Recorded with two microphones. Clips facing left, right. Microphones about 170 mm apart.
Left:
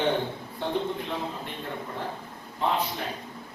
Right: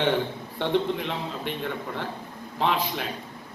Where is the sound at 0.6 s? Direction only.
80° right.